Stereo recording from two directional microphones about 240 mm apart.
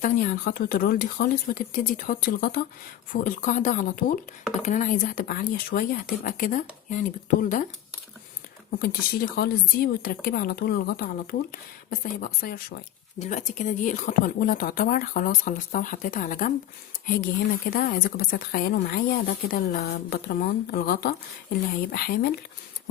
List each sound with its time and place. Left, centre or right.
0.4 s speech: left
8.8 s speech: left
17.7 s speech: left